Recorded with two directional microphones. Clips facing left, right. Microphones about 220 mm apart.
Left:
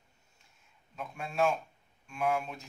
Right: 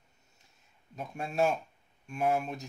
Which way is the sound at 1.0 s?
40° right (ahead or behind).